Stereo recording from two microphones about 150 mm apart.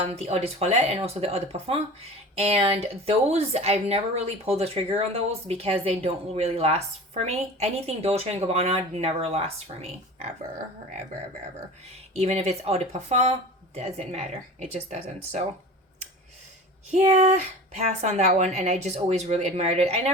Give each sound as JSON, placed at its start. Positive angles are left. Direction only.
{"t": 0.0, "sound": "speech", "side_deg": -45}
{"t": 10.8, "sound": "a sound", "side_deg": -60}
{"t": 11.9, "sound": "speech", "side_deg": -45}
{"t": 16.9, "sound": "speech", "side_deg": -50}